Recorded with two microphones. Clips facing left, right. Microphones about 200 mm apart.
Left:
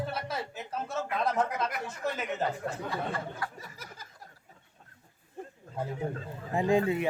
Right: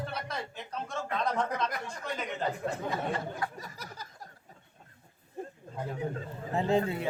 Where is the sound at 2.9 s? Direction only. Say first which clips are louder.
Right 1 dB; 20° right (ahead or behind).